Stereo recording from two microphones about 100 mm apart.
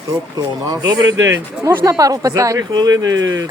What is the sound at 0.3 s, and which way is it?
Speech, 40° right (ahead or behind).